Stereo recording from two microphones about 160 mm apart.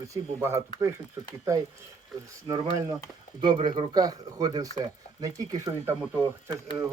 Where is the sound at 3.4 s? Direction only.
30° right (ahead or behind).